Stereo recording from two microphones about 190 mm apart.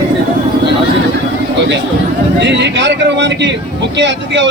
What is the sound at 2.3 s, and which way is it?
A man's voice, 65° right (ahead or behind).